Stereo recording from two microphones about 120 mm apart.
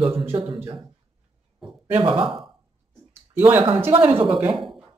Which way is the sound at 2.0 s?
45° right (ahead or behind).